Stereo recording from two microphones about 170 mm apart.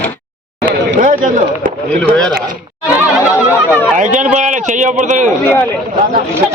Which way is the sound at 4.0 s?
45° right (ahead or behind).